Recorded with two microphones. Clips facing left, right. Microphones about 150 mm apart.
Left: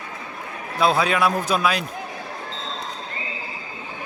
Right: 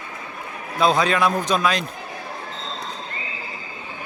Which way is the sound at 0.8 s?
5° left (ahead or behind).